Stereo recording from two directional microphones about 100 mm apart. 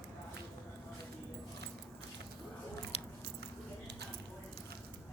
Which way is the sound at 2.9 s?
75° left (ahead or behind).